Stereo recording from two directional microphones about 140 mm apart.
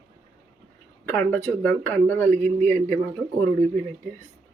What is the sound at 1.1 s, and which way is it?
Speech, 15° left (ahead or behind).